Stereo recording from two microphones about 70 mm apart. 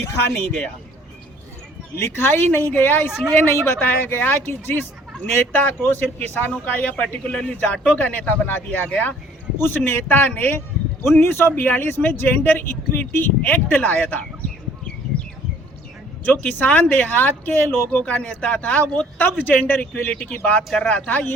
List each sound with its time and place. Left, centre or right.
2.0 s a man's voice: left
15.1 s bird: centre
16.2 s a man's voice: left